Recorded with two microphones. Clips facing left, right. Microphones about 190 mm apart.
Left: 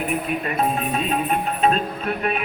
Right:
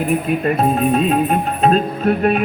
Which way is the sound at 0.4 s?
40° right (ahead or behind).